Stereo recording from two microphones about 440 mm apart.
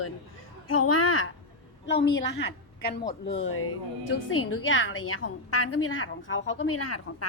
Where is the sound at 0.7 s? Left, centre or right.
Left.